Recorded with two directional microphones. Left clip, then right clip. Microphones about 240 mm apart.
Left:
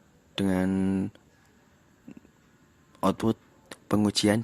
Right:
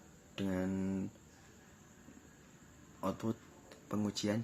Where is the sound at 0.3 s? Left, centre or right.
Left.